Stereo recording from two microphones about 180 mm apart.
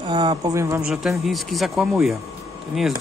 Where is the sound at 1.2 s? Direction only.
Centre (ahead or behind).